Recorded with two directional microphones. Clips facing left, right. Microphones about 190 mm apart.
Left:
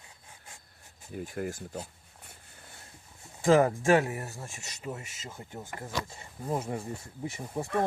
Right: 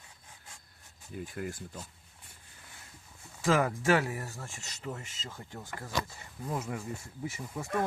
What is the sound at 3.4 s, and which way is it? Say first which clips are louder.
Speech: left 5 dB; 30° left (ahead or behind).